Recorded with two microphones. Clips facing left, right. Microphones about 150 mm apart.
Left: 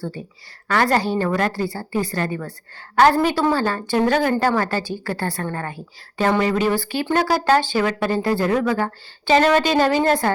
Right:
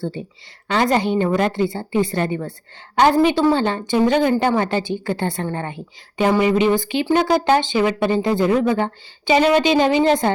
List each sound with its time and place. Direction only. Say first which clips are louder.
0.7 s a woman's voice: right 1 dB; 20° right (ahead or behind)